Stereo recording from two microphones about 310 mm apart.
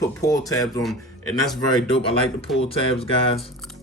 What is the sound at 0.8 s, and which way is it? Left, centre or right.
Speech, centre.